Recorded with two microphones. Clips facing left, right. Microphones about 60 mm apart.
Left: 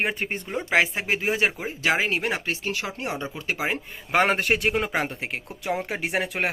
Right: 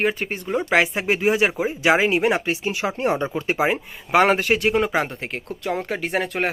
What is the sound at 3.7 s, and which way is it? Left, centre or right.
A man's voice, centre.